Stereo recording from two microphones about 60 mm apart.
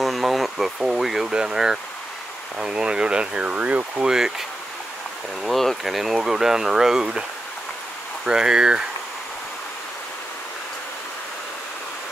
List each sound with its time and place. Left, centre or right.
0.0 s speech: centre; by 4.1 s right
4.1 s speech: centre
5.4 s speech: centre
8.3 s speech: centre